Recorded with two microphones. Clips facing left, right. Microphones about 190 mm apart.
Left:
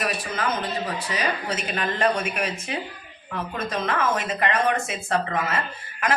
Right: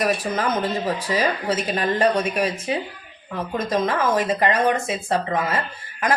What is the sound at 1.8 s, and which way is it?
A woman's voice, 35° right (ahead or behind).